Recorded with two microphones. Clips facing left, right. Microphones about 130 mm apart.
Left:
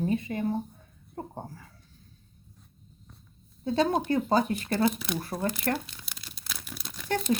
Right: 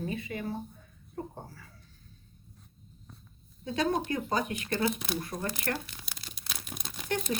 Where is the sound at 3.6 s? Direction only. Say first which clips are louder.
Left 4 dB; 30° left (ahead or behind).